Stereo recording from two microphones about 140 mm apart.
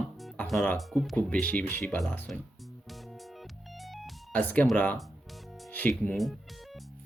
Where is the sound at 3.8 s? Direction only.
Centre (ahead or behind).